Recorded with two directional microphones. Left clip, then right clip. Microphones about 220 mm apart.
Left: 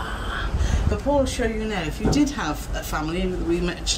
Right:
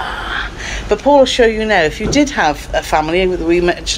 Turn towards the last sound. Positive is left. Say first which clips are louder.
# right 11 dB
turn(degrees=5)  # may be behind; listen again after turning